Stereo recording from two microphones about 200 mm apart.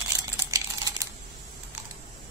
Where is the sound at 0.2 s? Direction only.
15° right (ahead or behind).